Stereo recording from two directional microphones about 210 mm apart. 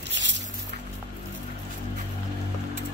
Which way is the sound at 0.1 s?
60° right (ahead or behind).